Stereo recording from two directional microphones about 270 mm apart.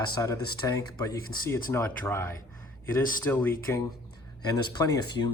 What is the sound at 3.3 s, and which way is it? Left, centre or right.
Speech, centre.